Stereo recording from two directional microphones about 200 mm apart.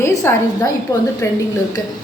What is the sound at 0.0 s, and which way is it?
Speech, 15° left (ahead or behind).